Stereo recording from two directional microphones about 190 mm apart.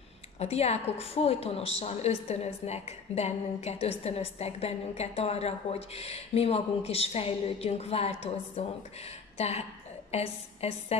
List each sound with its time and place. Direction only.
0.4 s a woman's voice: 35° left (ahead or behind)